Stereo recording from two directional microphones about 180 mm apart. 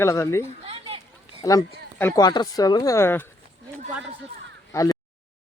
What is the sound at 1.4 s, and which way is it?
Speech, 20° left (ahead or behind).